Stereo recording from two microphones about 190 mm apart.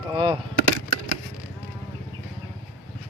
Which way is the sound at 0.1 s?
25° right (ahead or behind).